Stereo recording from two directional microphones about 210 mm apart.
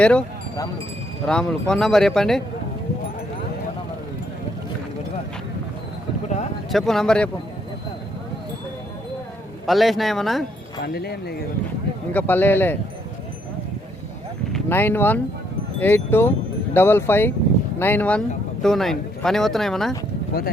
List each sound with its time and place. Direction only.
0.0 s speech: 5° left (ahead or behind)
1.3 s speech: 5° left (ahead or behind)
6.7 s speech: centre (ahead or behind)
9.6 s speech: centre (ahead or behind)
10.8 s speech: 50° left (ahead or behind)
12.1 s a man's voice: 10° left (ahead or behind)
14.5 s a man's voice: 10° left (ahead or behind)